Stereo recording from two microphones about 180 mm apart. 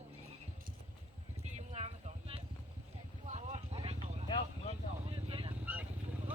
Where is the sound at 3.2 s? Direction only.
40° right (ahead or behind).